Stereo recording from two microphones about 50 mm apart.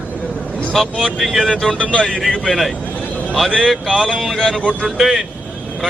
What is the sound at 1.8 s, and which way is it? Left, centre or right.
Speech, left.